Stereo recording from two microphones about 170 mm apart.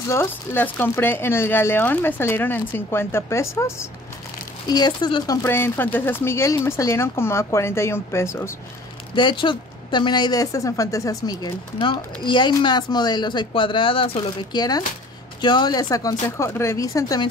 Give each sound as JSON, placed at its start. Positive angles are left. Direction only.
{"t": 0.1, "sound": "a woman's voice", "side_deg": 15}
{"t": 9.1, "sound": "a woman's voice", "side_deg": 30}